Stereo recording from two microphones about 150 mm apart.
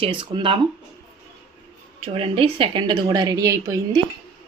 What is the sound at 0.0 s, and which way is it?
Speech, 35° right (ahead or behind).